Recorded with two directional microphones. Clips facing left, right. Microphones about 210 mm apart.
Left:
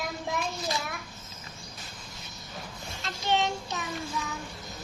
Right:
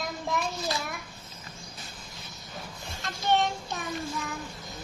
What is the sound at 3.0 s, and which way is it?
Child singing, 50° right (ahead or behind).